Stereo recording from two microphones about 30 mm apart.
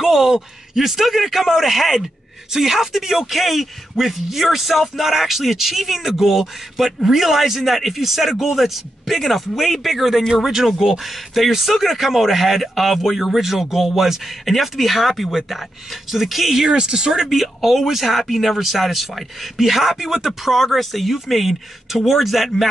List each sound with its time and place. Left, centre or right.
0.0 s a sound: centre
1.0 s speech: centre
16.6 s speech: right
17.4 s speech: centre
20.5 s speech: centre